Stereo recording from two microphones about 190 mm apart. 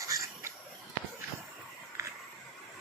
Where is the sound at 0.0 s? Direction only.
15° right (ahead or behind).